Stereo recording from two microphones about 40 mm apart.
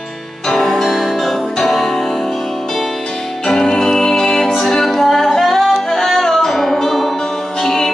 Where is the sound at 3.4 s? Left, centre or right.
Centre.